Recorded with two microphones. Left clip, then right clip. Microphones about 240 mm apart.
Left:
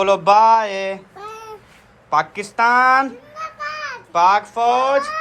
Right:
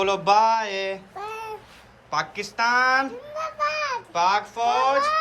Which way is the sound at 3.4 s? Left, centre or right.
Right.